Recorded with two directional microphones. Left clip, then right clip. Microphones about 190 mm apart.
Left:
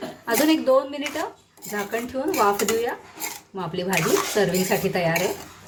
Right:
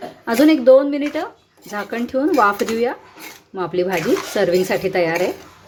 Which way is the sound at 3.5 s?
40° right (ahead or behind).